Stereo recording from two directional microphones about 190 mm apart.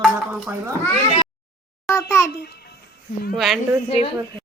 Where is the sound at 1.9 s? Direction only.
15° left (ahead or behind).